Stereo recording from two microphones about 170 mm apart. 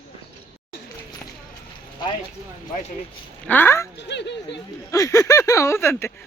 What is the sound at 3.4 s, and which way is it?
Speech, 10° left (ahead or behind).